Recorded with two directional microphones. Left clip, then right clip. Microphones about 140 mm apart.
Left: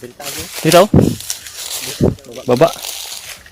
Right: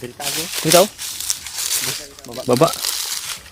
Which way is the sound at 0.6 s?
50° left (ahead or behind).